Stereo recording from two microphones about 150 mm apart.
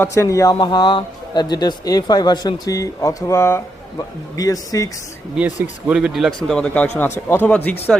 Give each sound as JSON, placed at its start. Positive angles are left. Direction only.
{"t": 0.0, "sound": "speech", "side_deg": 20}
{"t": 5.9, "sound": "a man's voice", "side_deg": -5}